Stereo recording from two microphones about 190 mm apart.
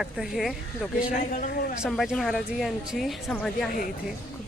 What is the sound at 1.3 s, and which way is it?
Speech, 45° left (ahead or behind).